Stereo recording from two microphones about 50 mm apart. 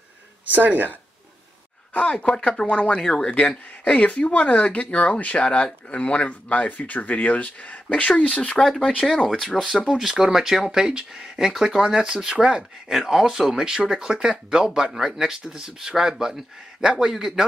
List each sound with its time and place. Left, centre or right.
0.5 s speech: right
2.0 s speech: left
2.6 s speech: left
2.9 s speech: centre
3.3 s speech: left
8.5 s speech: centre
10.1 s speech: centre